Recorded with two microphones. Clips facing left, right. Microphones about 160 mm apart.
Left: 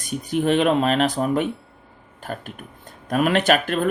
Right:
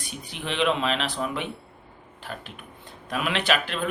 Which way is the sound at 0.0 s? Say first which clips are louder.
Left 14 dB; 45° left (ahead or behind).